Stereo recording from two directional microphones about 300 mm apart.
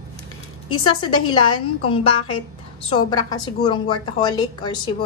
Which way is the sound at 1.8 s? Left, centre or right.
Centre.